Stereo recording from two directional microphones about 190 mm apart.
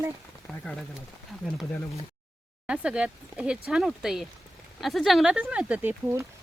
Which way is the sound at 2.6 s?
5° right (ahead or behind).